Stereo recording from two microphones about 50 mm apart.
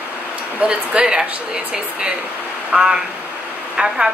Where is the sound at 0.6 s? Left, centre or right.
Right.